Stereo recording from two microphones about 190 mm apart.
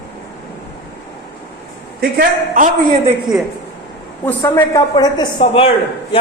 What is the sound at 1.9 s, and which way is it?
A man's voice, 50° right (ahead or behind).